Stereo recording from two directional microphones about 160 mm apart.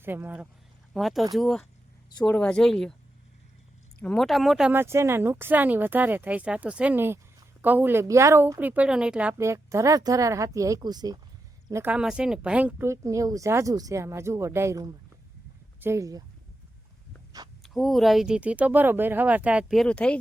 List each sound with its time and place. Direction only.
0.0 s speech: 10° right (ahead or behind)
0.9 s speech: centre (ahead or behind)
4.0 s speech: 5° left (ahead or behind)
9.4 s speech: 15° right (ahead or behind)
11.7 s speech: 10° right (ahead or behind)
17.6 s speech: centre (ahead or behind)